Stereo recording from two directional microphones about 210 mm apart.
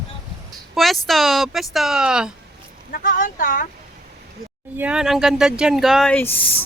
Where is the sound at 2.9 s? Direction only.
40° left (ahead or behind).